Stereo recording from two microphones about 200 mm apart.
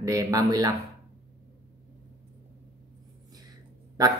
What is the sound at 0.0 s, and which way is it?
Speech, 15° right (ahead or behind).